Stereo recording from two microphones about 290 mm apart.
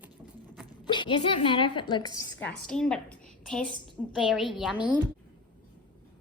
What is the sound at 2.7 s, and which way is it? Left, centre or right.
A woman's voice, centre.